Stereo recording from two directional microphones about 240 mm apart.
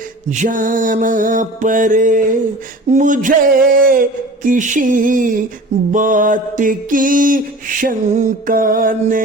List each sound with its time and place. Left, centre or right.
0.3 s mantra: right